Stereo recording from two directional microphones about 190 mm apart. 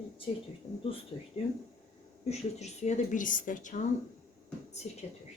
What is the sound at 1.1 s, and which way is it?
Speech, 20° left (ahead or behind).